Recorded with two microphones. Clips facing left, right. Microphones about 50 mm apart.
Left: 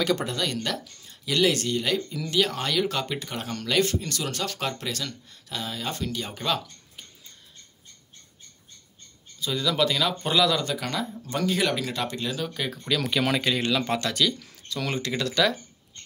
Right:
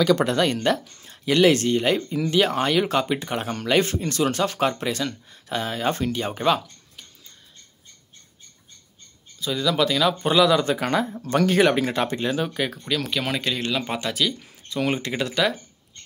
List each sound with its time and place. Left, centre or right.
0.4 s speech: right
5.5 s speech: right
9.4 s speech: centre
10.6 s speech: right
11.1 s speech: right
12.9 s speech: centre
13.7 s speech: centre
15.3 s speech: centre